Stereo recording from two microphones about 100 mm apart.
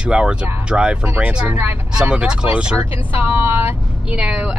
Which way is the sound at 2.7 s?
20° right (ahead or behind).